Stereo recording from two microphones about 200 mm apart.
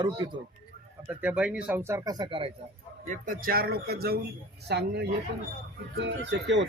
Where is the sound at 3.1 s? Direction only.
45° right (ahead or behind); by 6.7 s 65° right (ahead or behind).